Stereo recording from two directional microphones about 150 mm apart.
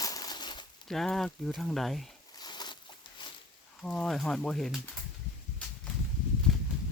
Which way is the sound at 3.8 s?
5° left (ahead or behind).